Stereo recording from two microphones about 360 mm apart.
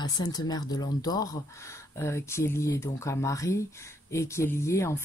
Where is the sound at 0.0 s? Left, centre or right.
Centre.